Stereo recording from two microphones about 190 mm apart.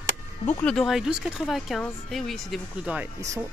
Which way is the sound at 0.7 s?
Centre (ahead or behind).